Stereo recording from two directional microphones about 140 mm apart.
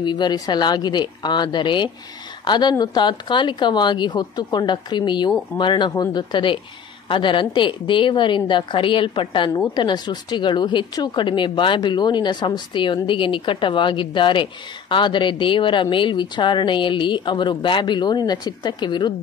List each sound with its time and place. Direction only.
0.0 s a woman's voice: 30° left (ahead or behind)